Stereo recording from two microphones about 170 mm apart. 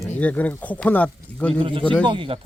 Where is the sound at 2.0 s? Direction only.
30° right (ahead or behind).